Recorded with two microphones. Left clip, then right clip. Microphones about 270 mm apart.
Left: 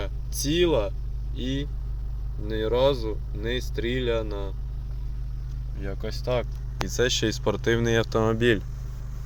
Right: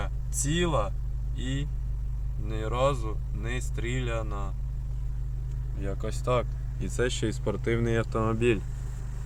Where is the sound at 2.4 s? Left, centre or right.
Centre.